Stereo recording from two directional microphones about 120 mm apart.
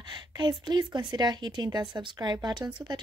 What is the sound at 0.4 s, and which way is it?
Speech, 40° right (ahead or behind).